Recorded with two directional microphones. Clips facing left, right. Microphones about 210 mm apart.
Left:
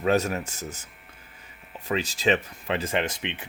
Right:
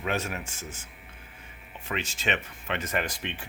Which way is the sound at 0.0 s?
40° left (ahead or behind).